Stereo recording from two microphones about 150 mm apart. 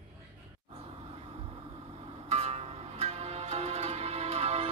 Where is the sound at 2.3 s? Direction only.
45° right (ahead or behind).